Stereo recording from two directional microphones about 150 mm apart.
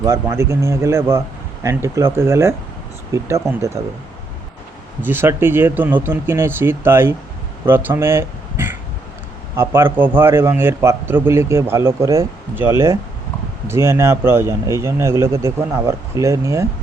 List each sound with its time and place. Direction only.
0.0 s a man's voice: 20° right (ahead or behind)
5.0 s a man's voice: 15° right (ahead or behind)